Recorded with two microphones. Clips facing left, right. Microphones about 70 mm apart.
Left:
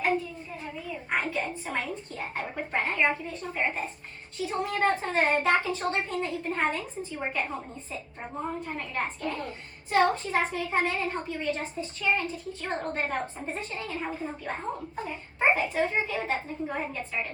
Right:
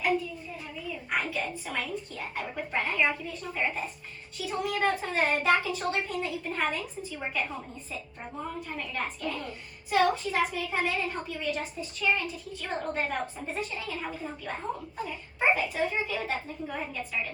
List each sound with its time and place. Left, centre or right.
1.1 s a child's voice: left